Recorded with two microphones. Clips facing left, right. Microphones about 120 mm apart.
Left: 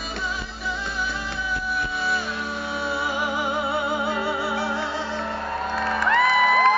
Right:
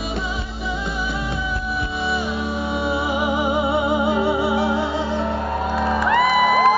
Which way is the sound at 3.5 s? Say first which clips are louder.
Right 6 dB; 20° right (ahead or behind).